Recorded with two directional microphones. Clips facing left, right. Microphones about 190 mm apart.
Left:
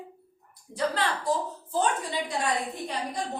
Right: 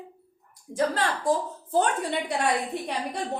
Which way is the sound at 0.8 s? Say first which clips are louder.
Right 2 dB; 45° right (ahead or behind).